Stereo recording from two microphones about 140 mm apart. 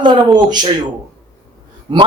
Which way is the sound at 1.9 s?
35° right (ahead or behind).